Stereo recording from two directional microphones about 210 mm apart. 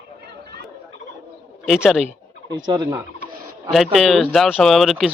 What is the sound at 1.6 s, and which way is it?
Speech, centre (ahead or behind).